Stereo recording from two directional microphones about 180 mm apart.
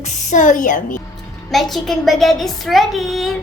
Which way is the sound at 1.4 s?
Centre (ahead or behind).